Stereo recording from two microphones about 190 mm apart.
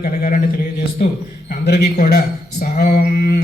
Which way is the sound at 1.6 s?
55° left (ahead or behind).